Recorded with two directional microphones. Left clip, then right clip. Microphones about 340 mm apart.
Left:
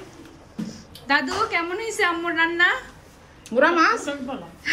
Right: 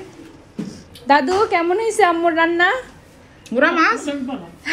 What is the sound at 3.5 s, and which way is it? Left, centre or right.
Speech, centre.